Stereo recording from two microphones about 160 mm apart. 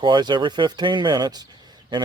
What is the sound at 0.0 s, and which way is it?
Speech, 30° right (ahead or behind).